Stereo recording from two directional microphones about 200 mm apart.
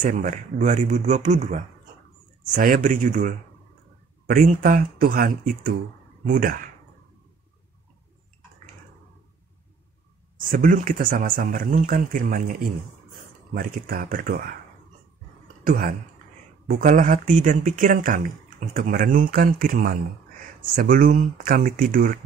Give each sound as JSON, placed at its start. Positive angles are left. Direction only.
{"t": 0.0, "sound": "speech", "side_deg": -40}
{"t": 10.5, "sound": "speech", "side_deg": -40}
{"t": 15.6, "sound": "speech", "side_deg": -45}